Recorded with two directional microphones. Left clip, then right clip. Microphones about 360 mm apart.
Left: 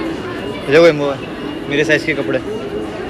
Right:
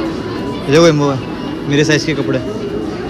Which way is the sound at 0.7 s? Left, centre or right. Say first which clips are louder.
Even; centre.